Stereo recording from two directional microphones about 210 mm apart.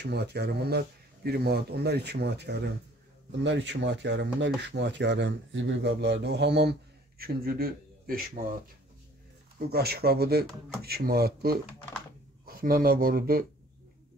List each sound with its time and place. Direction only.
0.0 s a man's voice: 50° right (ahead or behind)
9.7 s speech: 50° right (ahead or behind)